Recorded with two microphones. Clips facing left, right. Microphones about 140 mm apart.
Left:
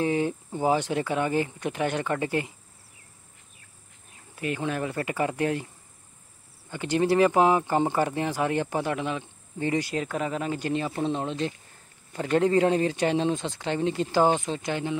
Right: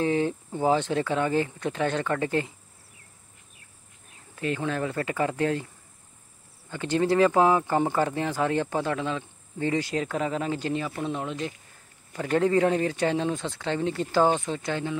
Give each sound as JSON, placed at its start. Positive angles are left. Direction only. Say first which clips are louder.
{"t": 0.0, "sound": "speech", "louder": "right 1 dB", "side_deg": 15}
{"t": 4.6, "sound": "speech", "louder": "left 1 dB", "side_deg": 20}
{"t": 6.7, "sound": "speech", "louder": "even", "side_deg": 15}
{"t": 10.1, "sound": "speech", "louder": "right 1 dB", "side_deg": -25}
{"t": 10.7, "sound": "speech", "louder": "left 2 dB", "side_deg": 25}